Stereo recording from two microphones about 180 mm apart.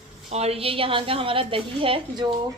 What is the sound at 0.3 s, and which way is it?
A woman's voice, 35° right (ahead or behind).